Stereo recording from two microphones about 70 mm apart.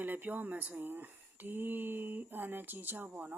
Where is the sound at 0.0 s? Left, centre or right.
Right.